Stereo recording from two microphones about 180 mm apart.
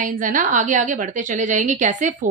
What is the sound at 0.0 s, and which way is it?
A woman's voice, 45° right (ahead or behind).